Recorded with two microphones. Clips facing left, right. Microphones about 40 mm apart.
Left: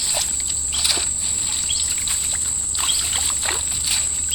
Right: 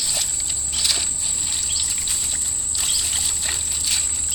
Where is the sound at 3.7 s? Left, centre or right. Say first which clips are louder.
Left 1 dB; centre.